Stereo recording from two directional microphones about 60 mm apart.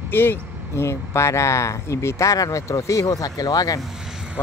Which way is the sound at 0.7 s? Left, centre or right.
Left.